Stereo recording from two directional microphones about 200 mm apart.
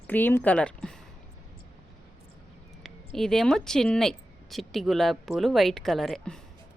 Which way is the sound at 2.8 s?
Centre (ahead or behind).